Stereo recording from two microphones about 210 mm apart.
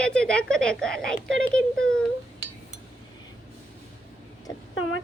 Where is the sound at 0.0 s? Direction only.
5° left (ahead or behind).